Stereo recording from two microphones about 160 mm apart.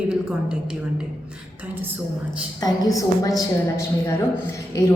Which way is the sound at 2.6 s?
25° left (ahead or behind).